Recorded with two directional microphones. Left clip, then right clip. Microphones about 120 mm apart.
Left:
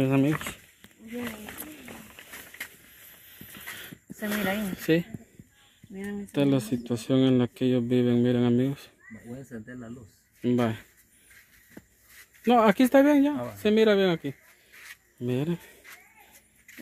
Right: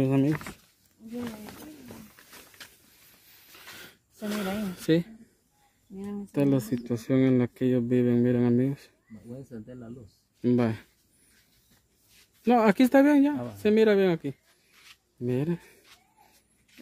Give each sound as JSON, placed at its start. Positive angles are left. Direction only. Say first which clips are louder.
{"t": 0.0, "sound": "speech", "louder": "left 1 dB", "side_deg": -15}
{"t": 3.5, "sound": "a sound", "louder": "left 5 dB", "side_deg": -25}
{"t": 6.3, "sound": "speech", "louder": "left 1 dB", "side_deg": -10}
{"t": 10.4, "sound": "speech", "louder": "even", "side_deg": -25}
{"t": 12.4, "sound": "speech", "louder": "left 1 dB", "side_deg": -15}